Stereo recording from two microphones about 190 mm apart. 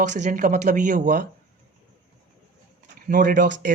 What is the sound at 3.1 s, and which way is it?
Speech, 45° right (ahead or behind).